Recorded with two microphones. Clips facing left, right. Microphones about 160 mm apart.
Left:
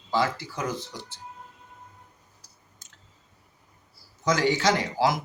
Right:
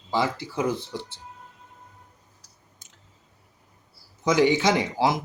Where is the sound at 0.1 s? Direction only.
20° right (ahead or behind).